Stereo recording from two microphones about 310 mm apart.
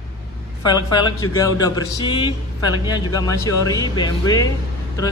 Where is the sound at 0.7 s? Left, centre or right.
Centre.